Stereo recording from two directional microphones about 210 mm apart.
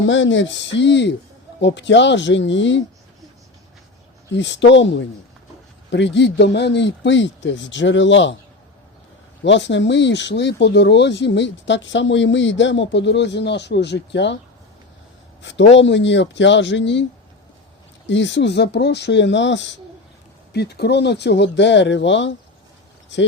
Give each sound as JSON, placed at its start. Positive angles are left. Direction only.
{"t": 0.0, "sound": "speech", "side_deg": 65}
{"t": 4.4, "sound": "speech", "side_deg": 60}
{"t": 9.4, "sound": "speech", "side_deg": 60}
{"t": 15.4, "sound": "speech", "side_deg": 60}